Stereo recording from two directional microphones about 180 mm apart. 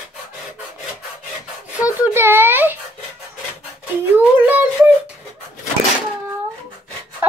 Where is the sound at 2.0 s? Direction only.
10° right (ahead or behind).